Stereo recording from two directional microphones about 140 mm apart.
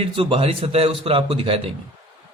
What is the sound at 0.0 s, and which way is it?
A man's voice, 40° right (ahead or behind).